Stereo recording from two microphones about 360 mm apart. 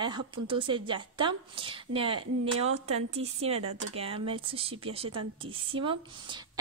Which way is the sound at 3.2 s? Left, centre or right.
Centre.